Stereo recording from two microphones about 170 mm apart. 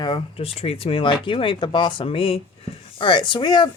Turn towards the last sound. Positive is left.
turn(degrees=25)  # may be behind; listen again after turning